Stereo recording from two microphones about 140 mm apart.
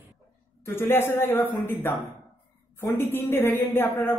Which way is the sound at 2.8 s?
15° left (ahead or behind).